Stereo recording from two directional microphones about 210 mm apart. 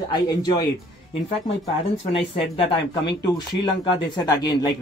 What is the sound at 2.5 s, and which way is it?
Speech, 25° left (ahead or behind).